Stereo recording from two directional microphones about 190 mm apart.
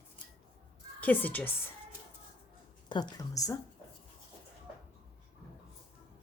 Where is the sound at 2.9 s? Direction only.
25° left (ahead or behind).